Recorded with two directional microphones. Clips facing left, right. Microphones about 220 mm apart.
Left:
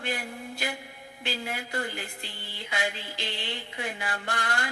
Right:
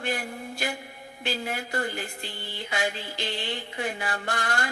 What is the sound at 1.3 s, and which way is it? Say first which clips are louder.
Music: right 3 dB; 50° right (ahead or behind).